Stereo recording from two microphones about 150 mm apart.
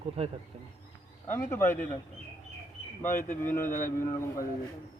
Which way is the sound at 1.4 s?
15° left (ahead or behind).